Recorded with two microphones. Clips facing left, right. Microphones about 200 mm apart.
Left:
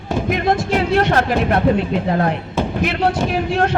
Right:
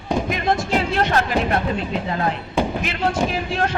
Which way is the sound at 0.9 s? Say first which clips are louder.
Left 6 dB; 60° left (ahead or behind).